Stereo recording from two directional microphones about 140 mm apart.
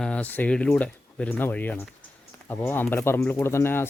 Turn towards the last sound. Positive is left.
turn(degrees=15)  # may be behind; listen again after turning